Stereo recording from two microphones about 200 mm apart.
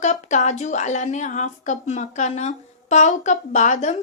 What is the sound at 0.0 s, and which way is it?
Speech, 35° left (ahead or behind).